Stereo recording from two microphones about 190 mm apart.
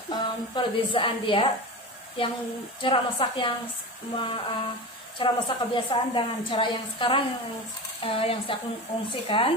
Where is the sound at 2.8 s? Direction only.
25° left (ahead or behind).